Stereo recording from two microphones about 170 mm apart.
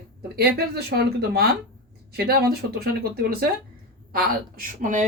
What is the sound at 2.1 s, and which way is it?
Speech, 65° right (ahead or behind).